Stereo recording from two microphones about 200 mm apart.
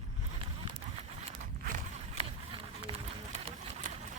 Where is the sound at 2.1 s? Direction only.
25° right (ahead or behind).